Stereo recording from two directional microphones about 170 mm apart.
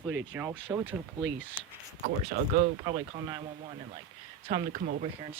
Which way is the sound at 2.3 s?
50° right (ahead or behind).